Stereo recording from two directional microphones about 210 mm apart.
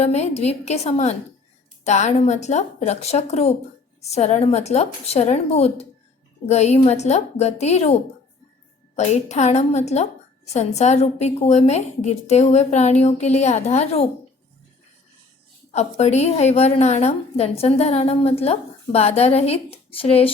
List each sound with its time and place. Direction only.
0.0 s a woman's voice: 30° left (ahead or behind)
9.0 s a woman's voice: 30° left (ahead or behind)
15.7 s a woman's voice: 30° left (ahead or behind)